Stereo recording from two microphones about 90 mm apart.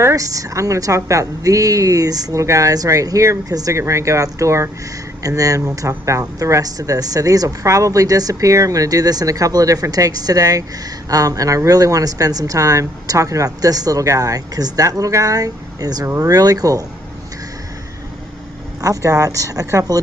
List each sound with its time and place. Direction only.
0.0 s speech: 40° right (ahead or behind)
18.8 s speech: 35° right (ahead or behind)